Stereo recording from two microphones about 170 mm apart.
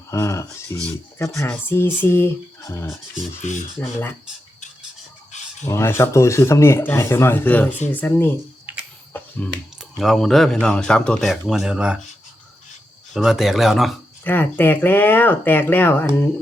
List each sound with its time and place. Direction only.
0.1 s speech: 15° left (ahead or behind)
5.3 s a sound: 45° left (ahead or behind)
5.6 s speech: 15° left (ahead or behind)
8.7 s a sound: 10° right (ahead or behind)
9.4 s speech: 10° left (ahead or behind)
13.1 s speech: centre (ahead or behind)
14.3 s speech: 10° left (ahead or behind)